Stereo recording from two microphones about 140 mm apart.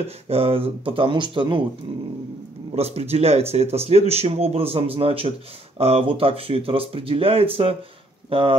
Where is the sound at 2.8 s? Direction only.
45° right (ahead or behind).